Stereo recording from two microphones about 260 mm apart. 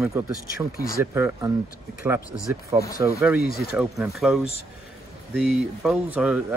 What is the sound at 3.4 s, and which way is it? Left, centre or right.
Speech, left.